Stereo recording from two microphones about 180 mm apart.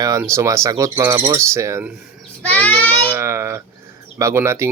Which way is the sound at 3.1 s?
15° right (ahead or behind).